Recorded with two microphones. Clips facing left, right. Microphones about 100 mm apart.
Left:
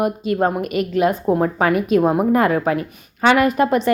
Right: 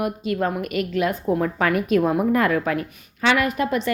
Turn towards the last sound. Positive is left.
turn(degrees=35)  # may be behind; listen again after turning